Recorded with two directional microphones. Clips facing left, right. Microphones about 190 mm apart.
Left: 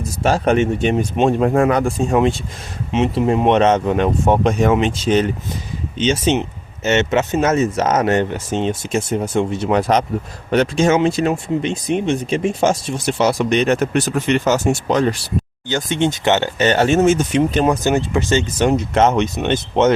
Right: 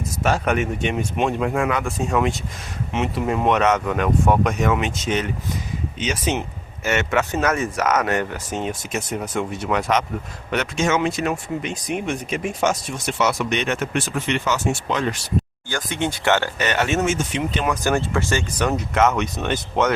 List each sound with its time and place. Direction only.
0.2 s speech: 30° left (ahead or behind)
15.7 s speech: 25° left (ahead or behind); by 17.7 s 40° left (ahead or behind)
17.8 s speech: 20° left (ahead or behind)